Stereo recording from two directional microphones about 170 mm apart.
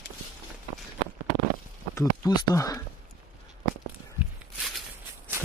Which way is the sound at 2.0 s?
20° left (ahead or behind).